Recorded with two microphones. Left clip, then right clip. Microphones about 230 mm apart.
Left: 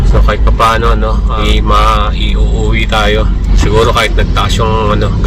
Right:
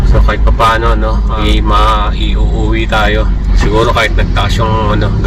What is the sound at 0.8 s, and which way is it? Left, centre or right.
Speech, centre.